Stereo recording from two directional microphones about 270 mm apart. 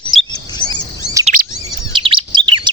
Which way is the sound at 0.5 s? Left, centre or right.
Centre.